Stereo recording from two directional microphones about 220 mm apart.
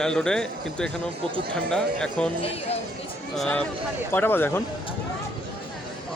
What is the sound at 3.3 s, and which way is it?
Speech, 5° left (ahead or behind).